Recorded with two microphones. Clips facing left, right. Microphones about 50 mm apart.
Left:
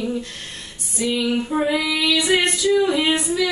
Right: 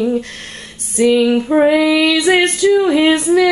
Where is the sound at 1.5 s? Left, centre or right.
Right.